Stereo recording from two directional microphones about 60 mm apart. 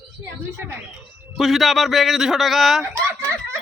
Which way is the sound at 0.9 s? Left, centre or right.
Centre.